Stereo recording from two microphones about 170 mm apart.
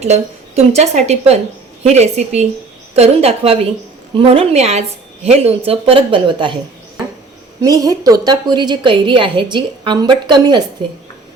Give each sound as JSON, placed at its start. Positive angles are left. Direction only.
{"t": 0.0, "sound": "speech", "side_deg": -40}
{"t": 7.6, "sound": "a woman's voice", "side_deg": -20}